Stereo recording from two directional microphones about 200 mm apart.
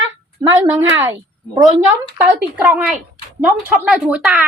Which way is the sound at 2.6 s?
5° right (ahead or behind).